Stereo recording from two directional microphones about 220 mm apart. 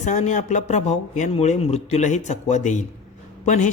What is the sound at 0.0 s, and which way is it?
A man's voice, 35° left (ahead or behind).